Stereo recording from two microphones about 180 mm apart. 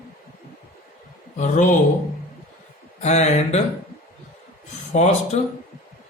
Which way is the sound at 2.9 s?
40° left (ahead or behind).